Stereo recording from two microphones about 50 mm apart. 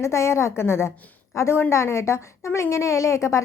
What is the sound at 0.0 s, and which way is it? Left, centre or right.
A woman's voice, left.